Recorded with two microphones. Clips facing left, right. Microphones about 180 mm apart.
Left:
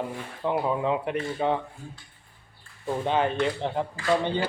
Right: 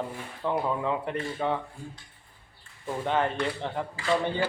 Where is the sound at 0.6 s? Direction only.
15° left (ahead or behind).